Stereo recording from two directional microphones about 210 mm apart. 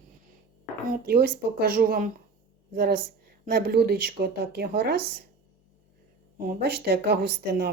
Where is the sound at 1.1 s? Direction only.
45° right (ahead or behind).